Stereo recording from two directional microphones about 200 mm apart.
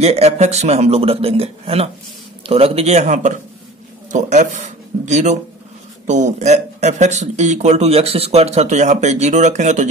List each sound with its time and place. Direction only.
0.0 s speech: 30° right (ahead or behind)